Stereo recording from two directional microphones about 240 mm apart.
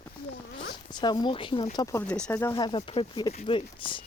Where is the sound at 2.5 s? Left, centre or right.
Centre.